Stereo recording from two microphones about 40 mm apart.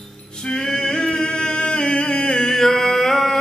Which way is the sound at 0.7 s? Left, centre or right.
Left.